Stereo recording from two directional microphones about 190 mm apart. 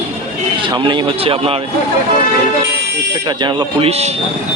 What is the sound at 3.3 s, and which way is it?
Speech, 25° right (ahead or behind).